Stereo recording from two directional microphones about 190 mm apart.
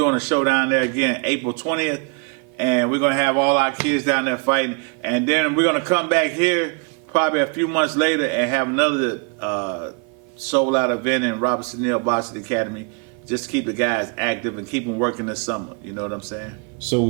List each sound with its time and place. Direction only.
0.0 s a man's voice: 10° right (ahead or behind)